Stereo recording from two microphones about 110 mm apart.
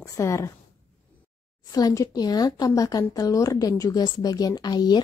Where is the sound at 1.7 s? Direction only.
30° left (ahead or behind).